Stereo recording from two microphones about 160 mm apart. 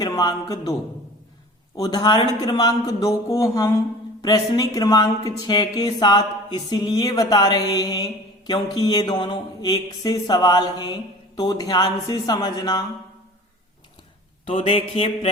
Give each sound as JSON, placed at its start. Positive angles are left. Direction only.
{"t": 0.0, "sound": "speech", "side_deg": 20}
{"t": 1.8, "sound": "speech", "side_deg": 25}
{"t": 14.4, "sound": "a sound", "side_deg": 35}